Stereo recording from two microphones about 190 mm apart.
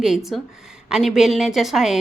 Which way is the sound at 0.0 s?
Centre (ahead or behind).